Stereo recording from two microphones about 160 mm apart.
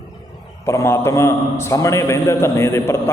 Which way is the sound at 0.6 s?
15° left (ahead or behind).